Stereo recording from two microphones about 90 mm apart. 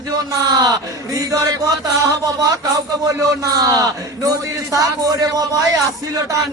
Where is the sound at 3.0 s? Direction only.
40° right (ahead or behind).